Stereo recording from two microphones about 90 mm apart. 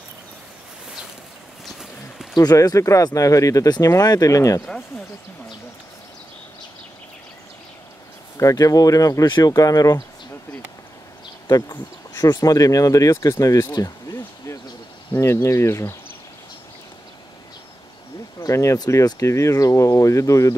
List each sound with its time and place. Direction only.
2.3 s speech: 45° left (ahead or behind)
8.4 s speech: 40° left (ahead or behind)
11.4 s speech: 40° left (ahead or behind)
13.7 s a sound: 45° left (ahead or behind)
15.1 s speech: 35° left (ahead or behind)
18.4 s speech: 35° left (ahead or behind)